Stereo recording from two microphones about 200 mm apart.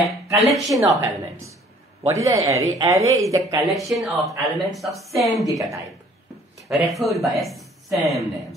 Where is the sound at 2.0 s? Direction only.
15° right (ahead or behind).